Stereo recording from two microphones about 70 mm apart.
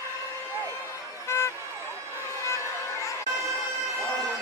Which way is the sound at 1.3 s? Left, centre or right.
Left.